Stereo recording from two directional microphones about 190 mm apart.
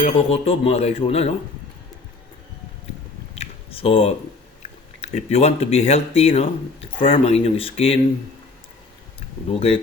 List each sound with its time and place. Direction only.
0.0 s speech: 30° left (ahead or behind)
3.3 s a sound: 30° left (ahead or behind)
4.9 s speech: 35° left (ahead or behind)
9.5 s speech: 30° left (ahead or behind)